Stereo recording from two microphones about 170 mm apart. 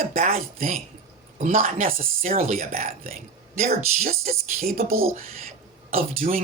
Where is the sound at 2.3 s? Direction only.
40° right (ahead or behind).